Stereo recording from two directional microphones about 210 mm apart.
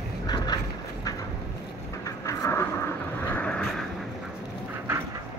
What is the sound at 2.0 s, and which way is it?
Vehicle, 15° left (ahead or behind).